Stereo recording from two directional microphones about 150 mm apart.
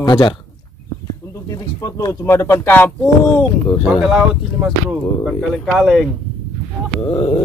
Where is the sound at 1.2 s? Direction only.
20° left (ahead or behind).